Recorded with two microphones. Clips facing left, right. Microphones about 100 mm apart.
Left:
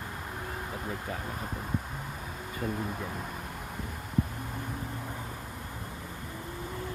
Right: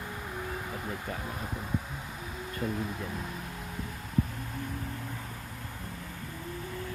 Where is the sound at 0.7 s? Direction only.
Centre (ahead or behind).